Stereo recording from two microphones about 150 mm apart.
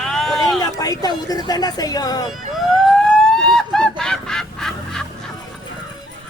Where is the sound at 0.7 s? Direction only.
25° left (ahead or behind).